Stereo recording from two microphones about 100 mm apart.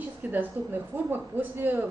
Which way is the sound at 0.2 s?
20° right (ahead or behind).